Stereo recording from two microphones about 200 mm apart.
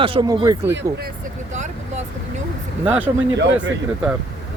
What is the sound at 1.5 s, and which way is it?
Vehicle, 35° right (ahead or behind).